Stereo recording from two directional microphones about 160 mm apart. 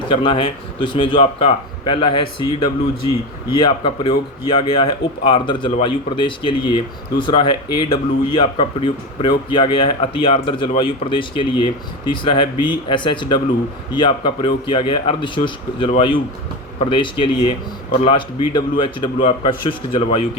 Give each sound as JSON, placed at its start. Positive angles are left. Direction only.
{"t": 0.1, "sound": "speech", "side_deg": 30}